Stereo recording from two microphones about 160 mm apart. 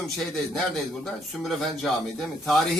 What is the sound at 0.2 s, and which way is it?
A man's voice, centre (ahead or behind).